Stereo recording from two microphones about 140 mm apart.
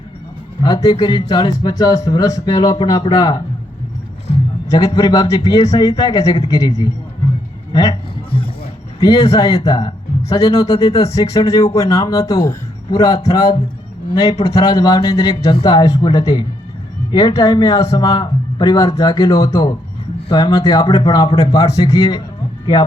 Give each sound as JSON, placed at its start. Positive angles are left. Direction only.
{"t": 0.6, "sound": "a man's voice", "side_deg": 25}
{"t": 4.7, "sound": "a man's voice", "side_deg": 30}
{"t": 9.0, "sound": "speech", "side_deg": 25}